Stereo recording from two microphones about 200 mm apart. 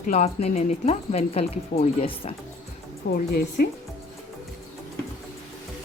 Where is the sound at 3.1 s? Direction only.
50° left (ahead or behind).